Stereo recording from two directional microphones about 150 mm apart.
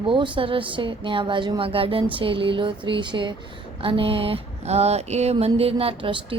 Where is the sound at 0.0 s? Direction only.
35° right (ahead or behind).